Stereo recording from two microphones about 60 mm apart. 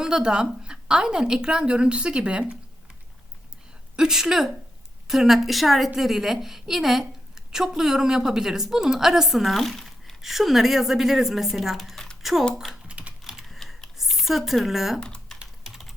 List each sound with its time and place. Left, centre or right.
0.0 s a woman's voice: centre
3.9 s a woman's voice: centre
12.9 s typing: right
13.2 s typing: centre
13.6 s typing: centre
14.0 s speech: centre
15.0 s typing: centre
15.4 s typing: centre